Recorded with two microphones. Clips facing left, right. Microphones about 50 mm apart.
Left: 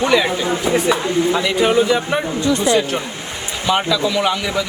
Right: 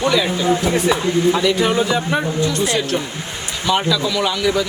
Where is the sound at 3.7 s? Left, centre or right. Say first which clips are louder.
Left 1 dB; centre.